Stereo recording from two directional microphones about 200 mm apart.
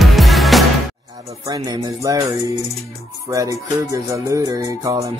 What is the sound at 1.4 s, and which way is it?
Music, 15° right (ahead or behind).